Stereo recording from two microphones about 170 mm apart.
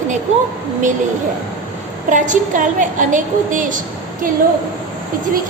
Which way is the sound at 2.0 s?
50° right (ahead or behind).